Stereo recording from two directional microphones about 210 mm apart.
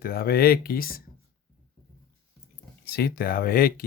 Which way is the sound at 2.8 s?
50° left (ahead or behind).